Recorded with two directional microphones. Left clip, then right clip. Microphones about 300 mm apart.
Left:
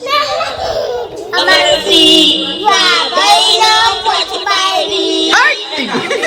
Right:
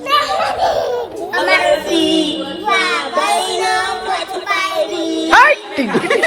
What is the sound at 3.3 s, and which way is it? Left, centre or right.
Child singing, centre.